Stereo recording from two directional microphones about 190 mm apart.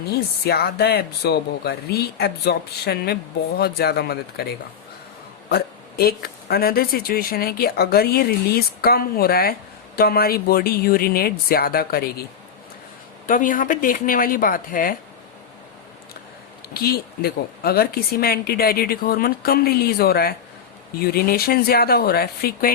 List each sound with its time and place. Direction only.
0.1 s speech: 55° left (ahead or behind)
5.5 s speech: 55° left (ahead or behind)
13.2 s speech: 45° left (ahead or behind)
16.7 s speech: 55° left (ahead or behind)